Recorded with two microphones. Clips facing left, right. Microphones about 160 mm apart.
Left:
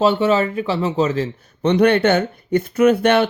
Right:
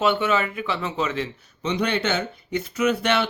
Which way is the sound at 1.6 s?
60° left (ahead or behind).